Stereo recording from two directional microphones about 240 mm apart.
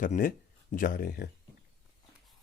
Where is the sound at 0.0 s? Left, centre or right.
Left.